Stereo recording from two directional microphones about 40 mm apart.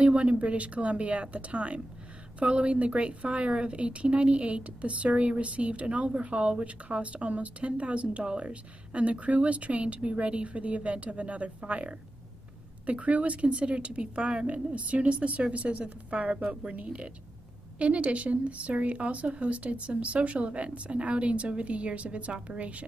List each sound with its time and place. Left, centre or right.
0.0 s a woman's voice: right